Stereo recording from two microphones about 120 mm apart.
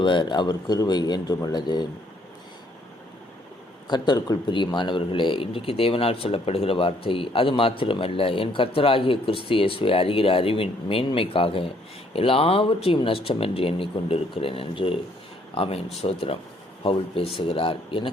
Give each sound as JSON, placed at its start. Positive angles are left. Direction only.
{"t": 0.0, "sound": "speech", "side_deg": 40}
{"t": 3.8, "sound": "speech", "side_deg": 40}